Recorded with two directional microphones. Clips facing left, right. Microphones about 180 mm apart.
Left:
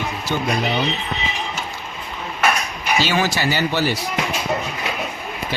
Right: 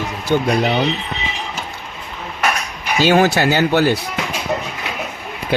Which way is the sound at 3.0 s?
55° right (ahead or behind).